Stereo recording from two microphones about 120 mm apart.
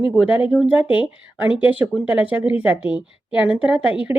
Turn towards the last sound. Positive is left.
turn(degrees=-10)  # may be behind; listen again after turning